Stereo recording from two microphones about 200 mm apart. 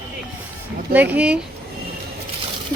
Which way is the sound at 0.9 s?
10° right (ahead or behind).